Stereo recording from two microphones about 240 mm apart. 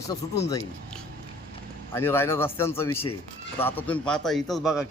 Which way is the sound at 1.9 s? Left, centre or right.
Centre.